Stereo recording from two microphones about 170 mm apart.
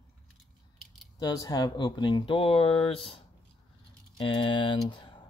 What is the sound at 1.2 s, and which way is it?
Speech, 20° left (ahead or behind).